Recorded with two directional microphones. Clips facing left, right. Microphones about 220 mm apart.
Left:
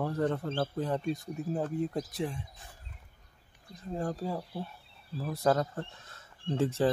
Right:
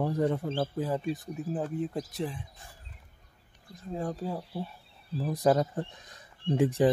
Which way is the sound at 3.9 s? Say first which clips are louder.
Even; centre (ahead or behind).